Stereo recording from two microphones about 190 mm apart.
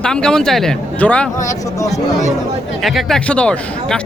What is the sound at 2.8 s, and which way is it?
A man's voice, centre (ahead or behind).